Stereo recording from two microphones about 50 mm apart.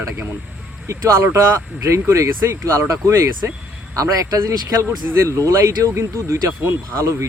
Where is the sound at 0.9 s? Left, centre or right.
Right.